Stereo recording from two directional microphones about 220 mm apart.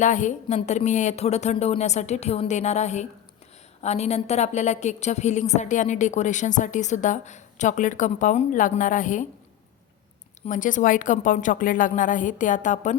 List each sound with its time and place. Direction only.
0.0 s a woman's voice: 35° left (ahead or behind)
10.4 s a woman's voice: 35° left (ahead or behind)